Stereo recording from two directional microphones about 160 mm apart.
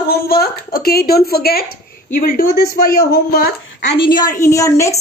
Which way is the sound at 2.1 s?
65° left (ahead or behind).